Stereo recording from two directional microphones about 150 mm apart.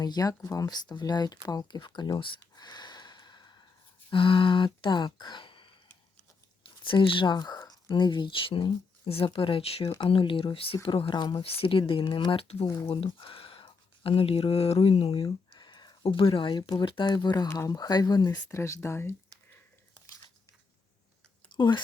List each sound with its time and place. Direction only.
0.0 s speech: 25° left (ahead or behind)
2.6 s a sound: 30° left (ahead or behind)
4.1 s speech: 35° left (ahead or behind)
6.8 s speech: 35° left (ahead or behind); by 19.1 s 15° left (ahead or behind)
21.5 s chewing: 30° left (ahead or behind)